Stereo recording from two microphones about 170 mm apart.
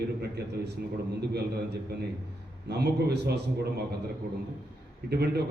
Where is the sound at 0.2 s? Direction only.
75° right (ahead or behind).